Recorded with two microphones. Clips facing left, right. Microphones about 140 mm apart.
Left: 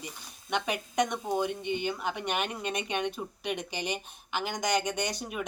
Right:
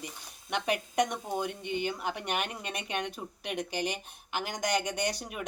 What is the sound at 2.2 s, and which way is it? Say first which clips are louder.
Speech: left 2 dB; 10° right (ahead or behind).